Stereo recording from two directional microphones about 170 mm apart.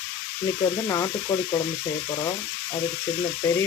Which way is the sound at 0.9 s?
20° left (ahead or behind).